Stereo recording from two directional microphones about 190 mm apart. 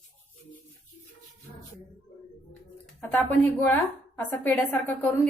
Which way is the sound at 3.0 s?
10° left (ahead or behind).